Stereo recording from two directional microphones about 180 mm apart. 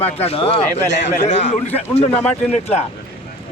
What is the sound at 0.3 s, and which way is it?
Speech, 30° left (ahead or behind).